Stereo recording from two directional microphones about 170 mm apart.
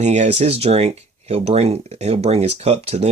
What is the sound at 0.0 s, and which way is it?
Speech, 40° right (ahead or behind).